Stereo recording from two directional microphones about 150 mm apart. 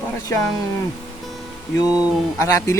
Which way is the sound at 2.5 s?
20° left (ahead or behind).